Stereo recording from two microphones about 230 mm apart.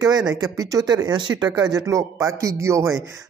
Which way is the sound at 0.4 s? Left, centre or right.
Centre.